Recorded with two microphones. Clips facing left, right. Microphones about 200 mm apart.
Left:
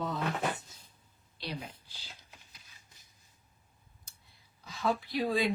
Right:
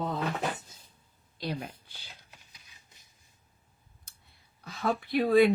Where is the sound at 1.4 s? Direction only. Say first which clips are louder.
Right 5 dB; 55° right (ahead or behind).